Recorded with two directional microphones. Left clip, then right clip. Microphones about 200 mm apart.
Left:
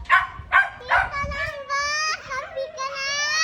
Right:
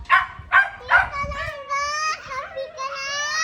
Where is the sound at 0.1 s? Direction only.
50° left (ahead or behind).